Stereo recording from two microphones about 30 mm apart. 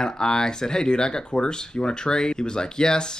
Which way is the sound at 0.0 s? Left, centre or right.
Left.